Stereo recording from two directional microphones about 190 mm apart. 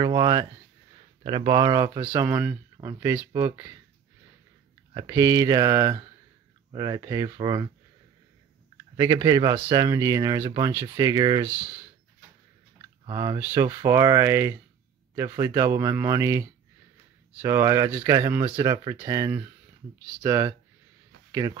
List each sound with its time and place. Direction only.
0.0 s speech: 20° right (ahead or behind)
2.0 s speech: 10° right (ahead or behind)
4.9 s speech: 20° right (ahead or behind)
8.9 s speech: 20° right (ahead or behind)
13.0 s speech: 25° right (ahead or behind)
13.4 s speech: 10° right (ahead or behind)